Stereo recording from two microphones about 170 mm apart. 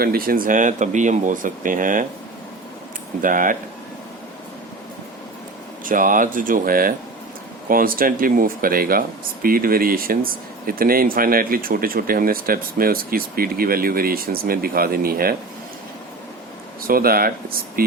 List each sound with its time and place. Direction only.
0.0 s speech: 60° right (ahead or behind)
3.2 s speech: 50° right (ahead or behind)
5.8 s speech: 55° right (ahead or behind)
16.8 s speech: 60° right (ahead or behind)